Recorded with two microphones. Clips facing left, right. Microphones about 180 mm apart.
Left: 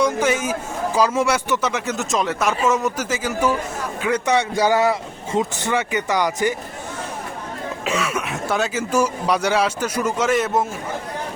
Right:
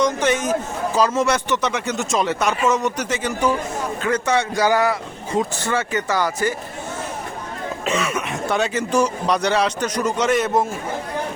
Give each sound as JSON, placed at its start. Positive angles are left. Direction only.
{"t": 0.0, "sound": "speech", "side_deg": 10}
{"t": 4.0, "sound": "speech", "side_deg": 15}
{"t": 7.9, "sound": "speech", "side_deg": 0}